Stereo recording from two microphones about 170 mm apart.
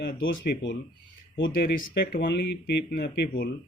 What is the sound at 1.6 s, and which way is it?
Speech, 60° left (ahead or behind).